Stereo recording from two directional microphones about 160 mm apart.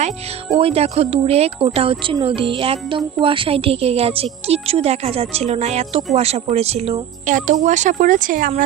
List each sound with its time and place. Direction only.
0.6 s a woman's voice: 40° right (ahead or behind); by 8.6 s 60° right (ahead or behind)